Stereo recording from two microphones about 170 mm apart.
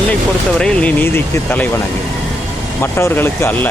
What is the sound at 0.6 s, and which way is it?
Speech, 5° left (ahead or behind).